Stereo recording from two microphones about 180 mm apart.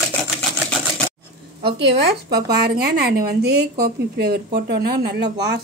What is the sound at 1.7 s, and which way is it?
Speech, 65° right (ahead or behind).